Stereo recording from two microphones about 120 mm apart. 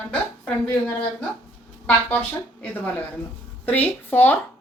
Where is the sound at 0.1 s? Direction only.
10° left (ahead or behind).